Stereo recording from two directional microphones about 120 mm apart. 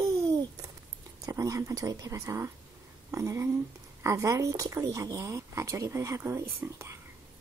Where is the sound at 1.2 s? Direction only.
25° right (ahead or behind).